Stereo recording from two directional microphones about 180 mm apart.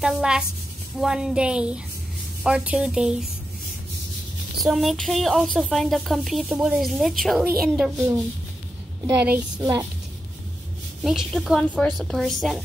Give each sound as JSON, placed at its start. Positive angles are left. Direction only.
{"t": 0.0, "sound": "speech", "side_deg": -5}
{"t": 4.6, "sound": "speech", "side_deg": 0}
{"t": 9.0, "sound": "a child's voice", "side_deg": -15}
{"t": 11.1, "sound": "speech", "side_deg": 0}